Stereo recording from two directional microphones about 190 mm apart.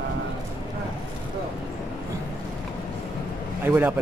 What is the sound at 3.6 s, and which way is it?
Speech, 10° right (ahead or behind).